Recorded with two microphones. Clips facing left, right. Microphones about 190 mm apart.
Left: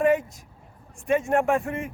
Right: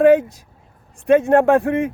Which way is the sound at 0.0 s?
70° right (ahead or behind).